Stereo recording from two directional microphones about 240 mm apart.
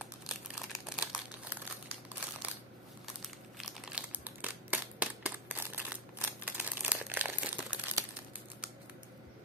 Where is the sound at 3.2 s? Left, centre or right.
Centre.